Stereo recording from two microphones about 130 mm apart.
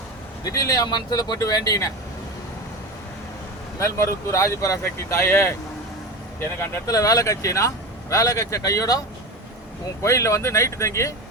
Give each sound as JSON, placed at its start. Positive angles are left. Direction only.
{"t": 0.4, "sound": "speech", "side_deg": 25}
{"t": 3.8, "sound": "speech", "side_deg": 20}
{"t": 6.6, "sound": "speech", "side_deg": 25}
{"t": 10.0, "sound": "speech", "side_deg": 25}